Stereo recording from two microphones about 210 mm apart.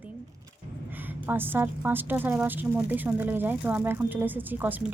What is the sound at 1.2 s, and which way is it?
A woman's voice, 10° right (ahead or behind).